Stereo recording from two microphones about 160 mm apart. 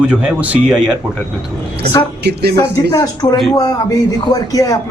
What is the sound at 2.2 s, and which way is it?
Speech, 90° right.